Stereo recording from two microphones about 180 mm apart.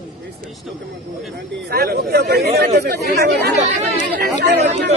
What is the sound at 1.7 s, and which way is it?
A man's voice, 60° right (ahead or behind).